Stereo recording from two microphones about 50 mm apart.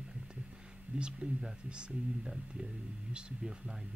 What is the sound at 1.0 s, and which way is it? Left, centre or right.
Speech, centre.